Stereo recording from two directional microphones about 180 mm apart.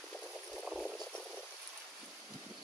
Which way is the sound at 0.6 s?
Centre (ahead or behind).